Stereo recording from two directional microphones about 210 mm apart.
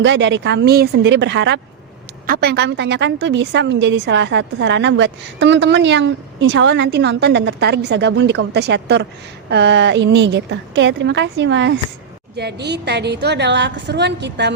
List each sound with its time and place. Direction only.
0.0 s a woman's voice: 60° right (ahead or behind)
2.2 s a woman's voice: 45° right (ahead or behind)